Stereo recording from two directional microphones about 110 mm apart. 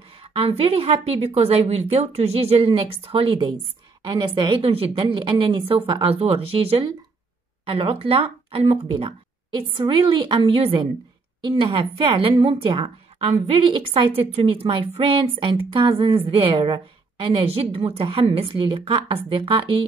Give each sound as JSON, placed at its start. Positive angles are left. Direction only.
{"t": 0.2, "sound": "speech", "side_deg": -60}
{"t": 4.0, "sound": "a woman's voice", "side_deg": -45}
{"t": 4.6, "sound": "speech", "side_deg": -60}
{"t": 9.5, "sound": "a woman's voice", "side_deg": -45}
{"t": 14.3, "sound": "speech", "side_deg": -60}
{"t": 18.5, "sound": "a woman's voice", "side_deg": -50}